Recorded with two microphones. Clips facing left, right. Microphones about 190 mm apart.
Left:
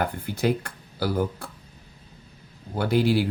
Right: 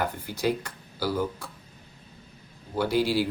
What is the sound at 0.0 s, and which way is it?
Speech, 55° left (ahead or behind).